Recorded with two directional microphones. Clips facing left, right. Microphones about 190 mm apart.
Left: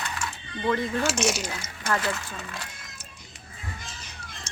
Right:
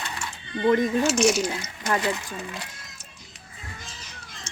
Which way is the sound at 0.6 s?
15° right (ahead or behind).